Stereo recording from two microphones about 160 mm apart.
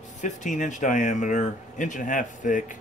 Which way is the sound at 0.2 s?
50° left (ahead or behind).